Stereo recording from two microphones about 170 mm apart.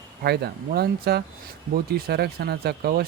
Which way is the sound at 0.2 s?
70° right (ahead or behind).